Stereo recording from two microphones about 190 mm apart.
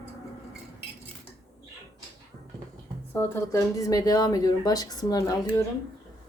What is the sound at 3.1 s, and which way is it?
Speech, 15° left (ahead or behind).